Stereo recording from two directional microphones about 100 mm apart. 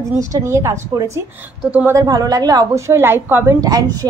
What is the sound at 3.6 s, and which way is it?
Speech, 40° right (ahead or behind).